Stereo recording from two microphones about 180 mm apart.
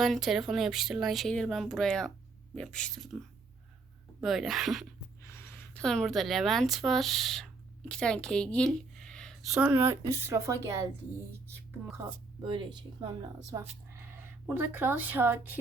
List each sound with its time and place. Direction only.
0.0 s speech: centre (ahead or behind)
4.2 s speech: centre (ahead or behind)
5.2 s speech: 15° left (ahead or behind)
9.5 s a woman's voice: 10° right (ahead or behind)
11.9 s speech: 25° right (ahead or behind)